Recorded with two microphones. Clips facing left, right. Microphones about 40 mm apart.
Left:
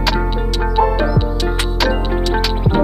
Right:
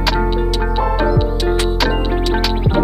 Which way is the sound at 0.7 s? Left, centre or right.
Centre.